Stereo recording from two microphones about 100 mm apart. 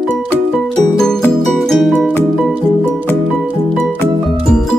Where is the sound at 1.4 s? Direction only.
Centre (ahead or behind).